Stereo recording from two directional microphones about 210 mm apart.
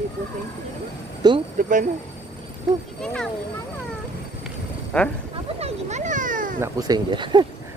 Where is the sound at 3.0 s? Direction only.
5° left (ahead or behind).